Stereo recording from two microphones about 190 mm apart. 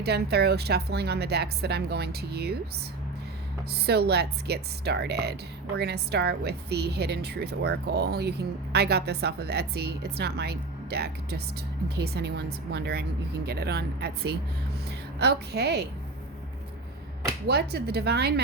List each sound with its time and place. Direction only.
0.0 s speech: 60° right (ahead or behind)
17.4 s speech: 60° right (ahead or behind)